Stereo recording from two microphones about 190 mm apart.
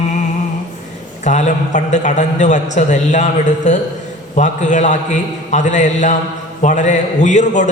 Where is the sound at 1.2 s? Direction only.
40° left (ahead or behind).